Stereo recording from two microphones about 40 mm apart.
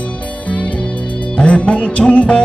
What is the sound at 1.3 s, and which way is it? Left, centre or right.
Music, left.